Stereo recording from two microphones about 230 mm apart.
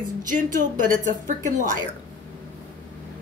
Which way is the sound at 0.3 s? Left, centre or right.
Right.